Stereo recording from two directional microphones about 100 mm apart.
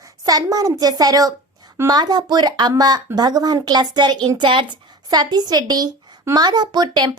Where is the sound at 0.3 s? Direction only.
40° right (ahead or behind).